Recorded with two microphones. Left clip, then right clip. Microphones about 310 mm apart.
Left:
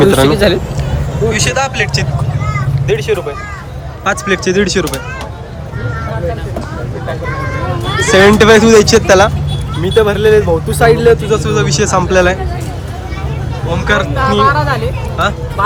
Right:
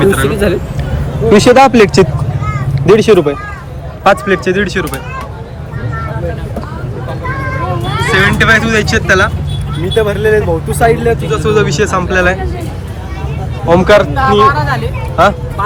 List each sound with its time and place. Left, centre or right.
0.0 s speech: centre
1.3 s speech: centre
3.1 s speech: right
4.0 s speech: centre
8.1 s speech: centre
13.7 s speech: centre